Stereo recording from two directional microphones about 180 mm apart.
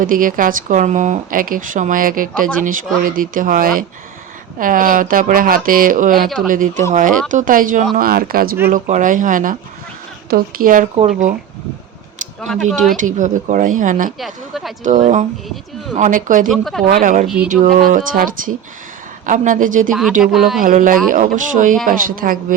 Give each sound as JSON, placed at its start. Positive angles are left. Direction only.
{"t": 0.0, "sound": "speech", "side_deg": -50}
{"t": 12.4, "sound": "speech", "side_deg": 0}
{"t": 13.0, "sound": "speech", "side_deg": -45}
{"t": 14.2, "sound": "speech", "side_deg": 0}
{"t": 14.8, "sound": "speech", "side_deg": -40}
{"t": 16.5, "sound": "speech", "side_deg": 0}
{"t": 16.9, "sound": "speech", "side_deg": -50}
{"t": 17.2, "sound": "speech", "side_deg": -5}
{"t": 17.5, "sound": "speech", "side_deg": -50}
{"t": 19.9, "sound": "speech", "side_deg": 0}
{"t": 20.6, "sound": "speech", "side_deg": -50}